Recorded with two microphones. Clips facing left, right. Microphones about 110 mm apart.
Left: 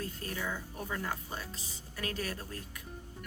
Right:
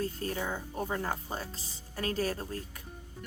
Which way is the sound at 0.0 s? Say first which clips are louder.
Right 5 dB; 30° right (ahead or behind).